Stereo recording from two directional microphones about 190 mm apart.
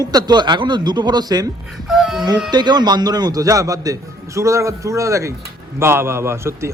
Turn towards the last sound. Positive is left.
turn(degrees=-15)  # may be behind; listen again after turning